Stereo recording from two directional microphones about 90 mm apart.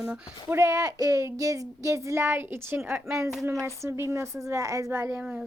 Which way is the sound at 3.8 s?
30° right (ahead or behind).